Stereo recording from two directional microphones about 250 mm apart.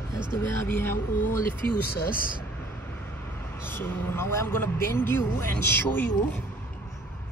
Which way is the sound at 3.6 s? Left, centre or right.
Centre.